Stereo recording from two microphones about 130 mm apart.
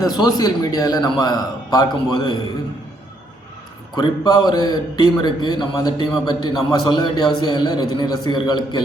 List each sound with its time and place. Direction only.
0.0 s a man's voice: 30° left (ahead or behind)
3.9 s a man's voice: 30° left (ahead or behind)